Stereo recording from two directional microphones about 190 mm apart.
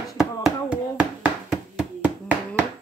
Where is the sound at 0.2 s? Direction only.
5° right (ahead or behind).